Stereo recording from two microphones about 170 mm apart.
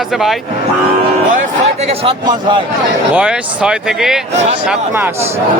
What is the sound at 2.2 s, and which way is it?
Speech, 25° right (ahead or behind).